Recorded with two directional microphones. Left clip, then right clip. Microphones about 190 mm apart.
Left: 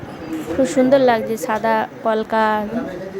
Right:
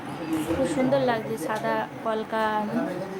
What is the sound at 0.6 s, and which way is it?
A woman's voice, 30° left (ahead or behind).